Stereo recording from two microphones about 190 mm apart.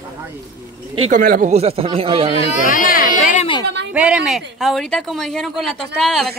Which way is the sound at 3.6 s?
65° right (ahead or behind).